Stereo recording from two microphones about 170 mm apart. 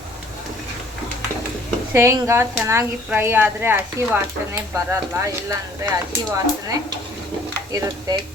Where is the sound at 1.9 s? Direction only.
15° right (ahead or behind).